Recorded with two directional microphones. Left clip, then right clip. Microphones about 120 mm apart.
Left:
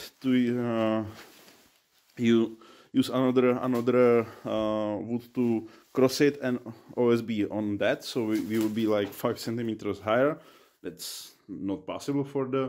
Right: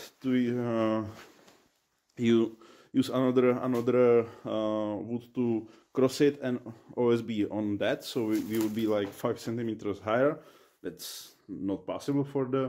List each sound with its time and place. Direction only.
0.0 s a sound: 30° left (ahead or behind)
2.1 s speech: 20° left (ahead or behind)
3.7 s speech: 40° left (ahead or behind); by 8.4 s 25° left (ahead or behind)
8.5 s speech: 40° left (ahead or behind)
10.8 s speech: 15° left (ahead or behind)